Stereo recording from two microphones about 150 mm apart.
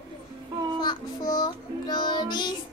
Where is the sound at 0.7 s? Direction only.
30° left (ahead or behind).